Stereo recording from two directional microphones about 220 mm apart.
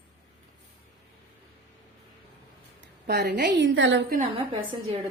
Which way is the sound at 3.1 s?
50° right (ahead or behind).